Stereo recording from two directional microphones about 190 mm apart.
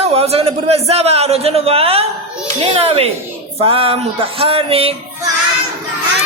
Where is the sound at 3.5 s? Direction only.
30° right (ahead or behind).